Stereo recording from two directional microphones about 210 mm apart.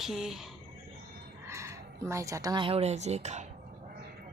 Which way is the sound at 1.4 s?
15° right (ahead or behind).